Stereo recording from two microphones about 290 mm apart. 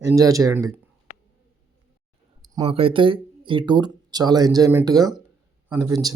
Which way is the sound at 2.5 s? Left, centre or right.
Centre.